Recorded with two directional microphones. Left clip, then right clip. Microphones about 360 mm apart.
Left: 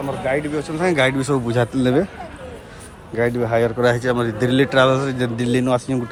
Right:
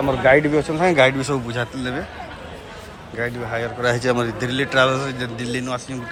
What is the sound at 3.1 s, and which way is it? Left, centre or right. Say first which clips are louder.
Speech: left 6 dB; centre.